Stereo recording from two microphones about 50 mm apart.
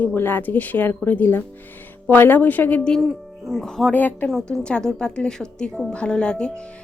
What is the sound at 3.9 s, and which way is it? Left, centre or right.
Speech, left.